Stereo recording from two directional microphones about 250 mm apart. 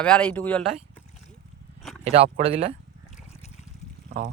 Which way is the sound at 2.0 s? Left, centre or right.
Right.